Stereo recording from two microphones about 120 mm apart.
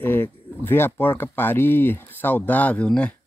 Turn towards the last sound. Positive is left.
turn(degrees=10)  # may be behind; listen again after turning